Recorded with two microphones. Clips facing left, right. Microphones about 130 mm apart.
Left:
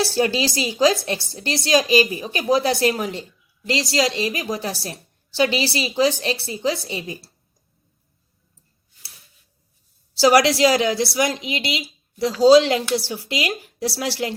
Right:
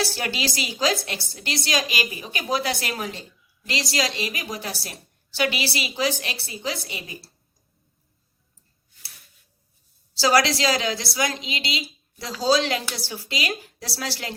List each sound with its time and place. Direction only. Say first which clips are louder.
0.0 s a woman's voice: left 7 dB; 25° left (ahead or behind)
10.2 s a woman's voice: left 5 dB; 20° left (ahead or behind)